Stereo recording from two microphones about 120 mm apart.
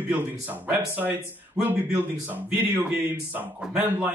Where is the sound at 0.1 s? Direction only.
15° right (ahead or behind).